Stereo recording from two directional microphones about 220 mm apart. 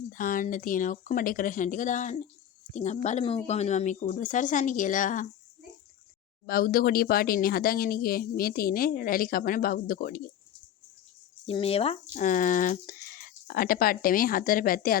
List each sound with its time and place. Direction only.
0.1 s speech: 40° left (ahead or behind)
6.4 s speech: 40° left (ahead or behind)
11.4 s speech: 25° left (ahead or behind)